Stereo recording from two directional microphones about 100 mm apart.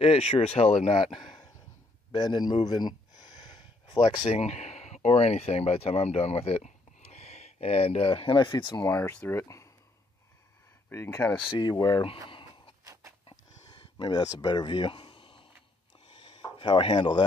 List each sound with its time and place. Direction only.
0.0 s speech: 75° left (ahead or behind)
0.9 s speech: 65° left (ahead or behind)
2.1 s speech: 45° left (ahead or behind)
2.6 s a sound: 45° left (ahead or behind)
4.3 s speech: 90° left; by 8.4 s 70° left (ahead or behind)
8.4 s speech: 45° left (ahead or behind)
8.8 s speech: 20° left (ahead or behind)
10.9 s speech: 25° left (ahead or behind)
11.8 s a sound: 60° left (ahead or behind)
12.8 s a sound: 30° right (ahead or behind)
13.9 s speech: 50° left (ahead or behind)
14.2 s speech: 40° left (ahead or behind); by 15.4 s 60° left (ahead or behind)
16.1 s a sound: 55° left (ahead or behind)